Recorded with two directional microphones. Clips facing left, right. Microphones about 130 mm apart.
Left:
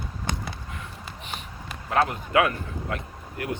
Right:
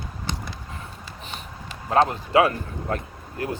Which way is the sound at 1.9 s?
30° right (ahead or behind).